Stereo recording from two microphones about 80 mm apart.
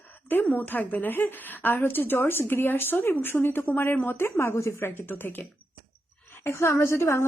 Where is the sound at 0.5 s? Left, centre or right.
Left.